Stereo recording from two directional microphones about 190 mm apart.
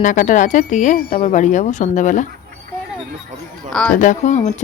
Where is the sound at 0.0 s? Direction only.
40° left (ahead or behind).